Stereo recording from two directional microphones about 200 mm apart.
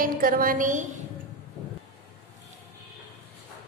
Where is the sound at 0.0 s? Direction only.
45° right (ahead or behind).